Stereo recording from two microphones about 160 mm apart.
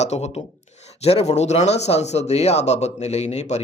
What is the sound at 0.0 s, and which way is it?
Speech, 45° left (ahead or behind).